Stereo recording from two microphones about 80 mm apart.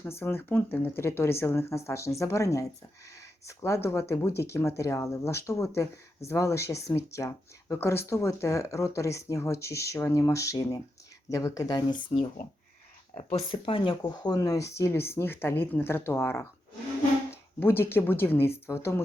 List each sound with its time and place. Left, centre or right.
0.0 s speech: left
11.9 s speech: left
13.5 s speech: left
17.6 s speech: left